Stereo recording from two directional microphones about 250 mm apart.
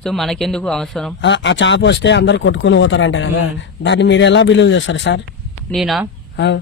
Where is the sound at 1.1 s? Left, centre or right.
Left.